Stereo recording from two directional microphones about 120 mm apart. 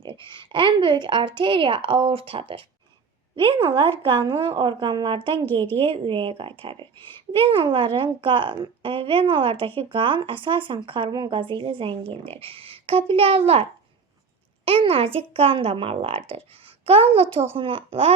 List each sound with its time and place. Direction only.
0.0 s a woman's voice: 40° right (ahead or behind)